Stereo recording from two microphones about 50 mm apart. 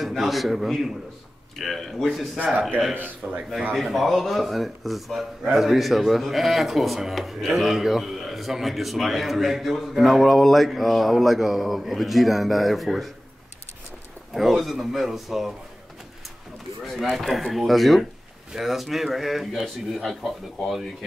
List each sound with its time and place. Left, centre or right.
0.0 s speech: centre
2.3 s a man's voice: right
3.7 s speech: centre
14.3 s speech: centre
17.1 s speech: centre